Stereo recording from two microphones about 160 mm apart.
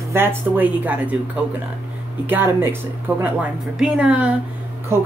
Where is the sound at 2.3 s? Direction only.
15° right (ahead or behind).